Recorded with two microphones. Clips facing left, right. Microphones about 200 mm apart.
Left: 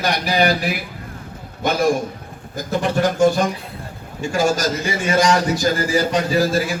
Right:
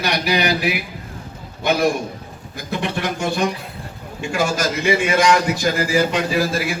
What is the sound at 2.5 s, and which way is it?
A man's voice, 40° left (ahead or behind).